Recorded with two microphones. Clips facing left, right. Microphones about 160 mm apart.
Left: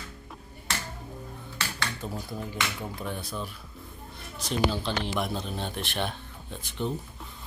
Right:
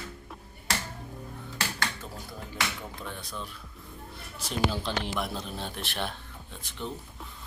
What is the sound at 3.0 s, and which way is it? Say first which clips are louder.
Speech: left 5 dB; 10° left (ahead or behind).